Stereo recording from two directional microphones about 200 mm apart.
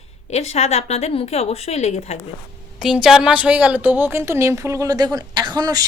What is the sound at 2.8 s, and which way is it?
A woman's voice, centre (ahead or behind).